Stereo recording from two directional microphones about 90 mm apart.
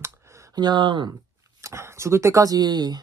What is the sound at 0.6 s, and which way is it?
Speech, 55° right (ahead or behind).